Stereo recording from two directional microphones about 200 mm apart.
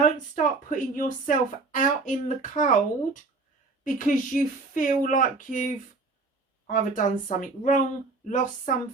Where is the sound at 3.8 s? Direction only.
40° left (ahead or behind).